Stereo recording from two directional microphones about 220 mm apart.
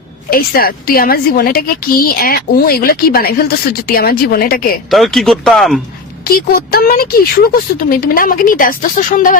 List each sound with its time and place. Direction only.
0.3 s a woman's voice: 40° left (ahead or behind)
4.9 s speech: centre (ahead or behind)
6.2 s a woman's voice: 40° left (ahead or behind)